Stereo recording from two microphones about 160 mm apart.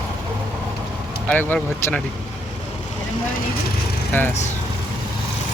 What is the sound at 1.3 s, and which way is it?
Speech, 10° left (ahead or behind).